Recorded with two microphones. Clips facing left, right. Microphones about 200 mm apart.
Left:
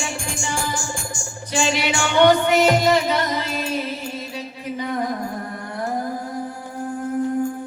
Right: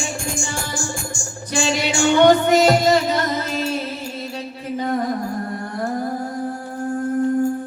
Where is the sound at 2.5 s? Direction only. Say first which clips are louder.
Right 2 dB; 40° right (ahead or behind).